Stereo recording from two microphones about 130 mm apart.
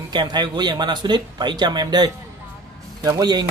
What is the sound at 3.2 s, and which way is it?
Speech, 30° right (ahead or behind).